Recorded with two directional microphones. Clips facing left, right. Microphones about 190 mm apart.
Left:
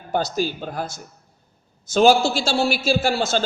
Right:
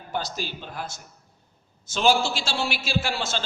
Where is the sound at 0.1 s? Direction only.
45° left (ahead or behind).